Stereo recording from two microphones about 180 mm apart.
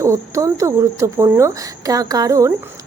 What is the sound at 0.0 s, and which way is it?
A woman's voice, 15° right (ahead or behind).